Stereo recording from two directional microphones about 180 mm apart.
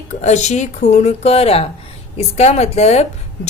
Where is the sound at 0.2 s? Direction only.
40° left (ahead or behind).